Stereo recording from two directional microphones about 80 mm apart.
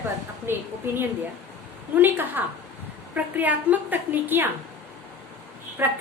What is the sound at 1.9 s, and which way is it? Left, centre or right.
A woman's voice, right.